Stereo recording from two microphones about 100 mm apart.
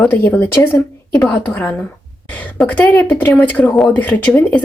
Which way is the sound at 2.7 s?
15° left (ahead or behind).